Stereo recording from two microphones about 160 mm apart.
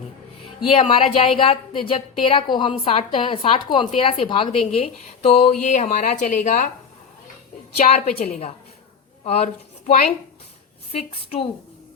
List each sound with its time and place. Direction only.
0.7 s speech: 35° left (ahead or behind); by 6.7 s 50° left (ahead or behind)
7.8 s a woman's voice: 40° left (ahead or behind)
10.9 s speech: 40° left (ahead or behind)